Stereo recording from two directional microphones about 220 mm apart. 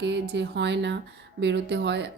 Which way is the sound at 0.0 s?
50° right (ahead or behind).